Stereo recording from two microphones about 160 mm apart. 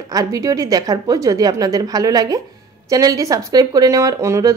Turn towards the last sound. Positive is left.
turn(degrees=-20)  # may be behind; listen again after turning